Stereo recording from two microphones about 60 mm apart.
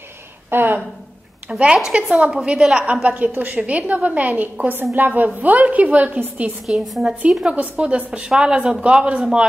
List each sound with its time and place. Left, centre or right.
0.5 s speech: right
1.5 s a man's voice: centre
6.6 s a woman's voice: centre
7.4 s a woman's voice: right